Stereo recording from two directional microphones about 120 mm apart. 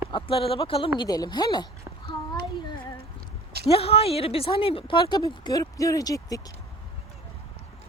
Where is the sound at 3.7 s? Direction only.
55° left (ahead or behind); by 6.4 s 30° left (ahead or behind).